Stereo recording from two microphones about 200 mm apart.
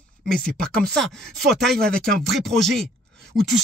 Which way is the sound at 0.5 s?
45° right (ahead or behind).